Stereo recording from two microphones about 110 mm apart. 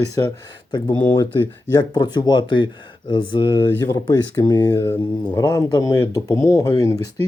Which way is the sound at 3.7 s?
30° left (ahead or behind).